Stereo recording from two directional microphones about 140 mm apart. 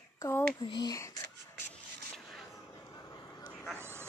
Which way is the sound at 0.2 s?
15° left (ahead or behind).